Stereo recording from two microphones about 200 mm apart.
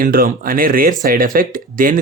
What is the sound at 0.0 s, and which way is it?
Speech, 45° right (ahead or behind).